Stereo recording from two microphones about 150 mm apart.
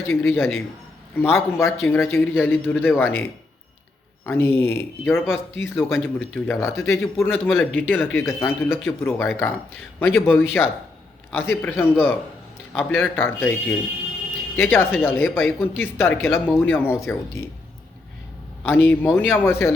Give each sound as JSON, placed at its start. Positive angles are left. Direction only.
{"t": 0.1, "sound": "speech", "side_deg": 15}
{"t": 18.6, "sound": "speech", "side_deg": 10}